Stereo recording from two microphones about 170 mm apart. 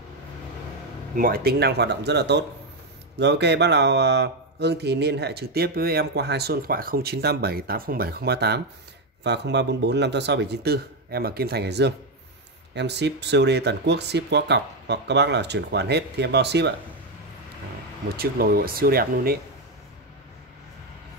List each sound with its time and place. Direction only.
1.1 s speech: 60° right (ahead or behind); by 8.6 s 75° right (ahead or behind)
9.2 s speech: 90° right
18.0 s speech: 60° right (ahead or behind)